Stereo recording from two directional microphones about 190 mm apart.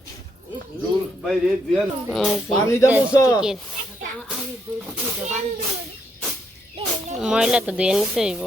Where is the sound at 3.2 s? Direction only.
20° left (ahead or behind).